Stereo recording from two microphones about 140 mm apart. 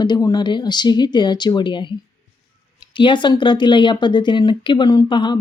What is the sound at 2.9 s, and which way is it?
Speech, 35° left (ahead or behind).